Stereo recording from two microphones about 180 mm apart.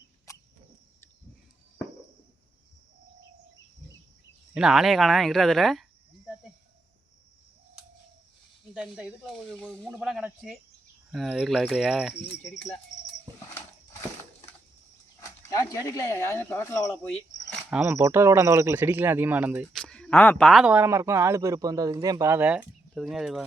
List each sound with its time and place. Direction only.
0.3 s rodents: 15° left (ahead or behind)
4.5 s speech: 5° right (ahead or behind)
8.7 s speech: 5° right (ahead or behind)
15.2 s a sound: 20° left (ahead or behind)
15.7 s speech: 20° left (ahead or behind)
17.7 s speech: 10° right (ahead or behind)
19.7 s speech: 5° left (ahead or behind)